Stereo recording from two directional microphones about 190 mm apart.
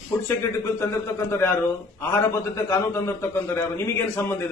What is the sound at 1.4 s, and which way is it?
A man's voice, 15° left (ahead or behind).